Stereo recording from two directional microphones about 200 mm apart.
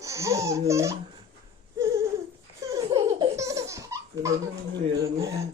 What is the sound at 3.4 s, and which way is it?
Baby laughter, 15° right (ahead or behind).